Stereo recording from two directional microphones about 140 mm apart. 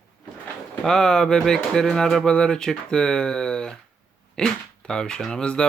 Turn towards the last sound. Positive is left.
turn(degrees=5)  # may be behind; listen again after turning